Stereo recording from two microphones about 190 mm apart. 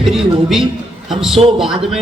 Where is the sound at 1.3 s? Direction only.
30° right (ahead or behind).